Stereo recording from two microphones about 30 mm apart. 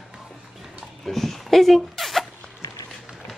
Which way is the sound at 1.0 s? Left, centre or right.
Centre.